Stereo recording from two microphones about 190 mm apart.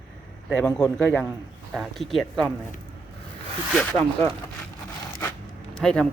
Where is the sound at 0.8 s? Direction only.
5° left (ahead or behind).